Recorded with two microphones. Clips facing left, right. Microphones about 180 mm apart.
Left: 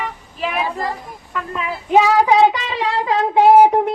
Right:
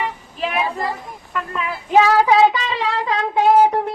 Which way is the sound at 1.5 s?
Centre (ahead or behind).